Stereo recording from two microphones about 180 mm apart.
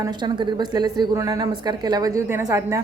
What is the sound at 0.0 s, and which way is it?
A woman's voice, 25° right (ahead or behind).